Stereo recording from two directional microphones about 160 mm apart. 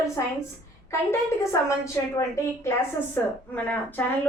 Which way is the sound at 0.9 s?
15° left (ahead or behind).